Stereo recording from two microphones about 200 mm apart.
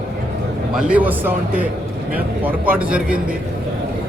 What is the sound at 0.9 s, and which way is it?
A man's voice, 10° right (ahead or behind).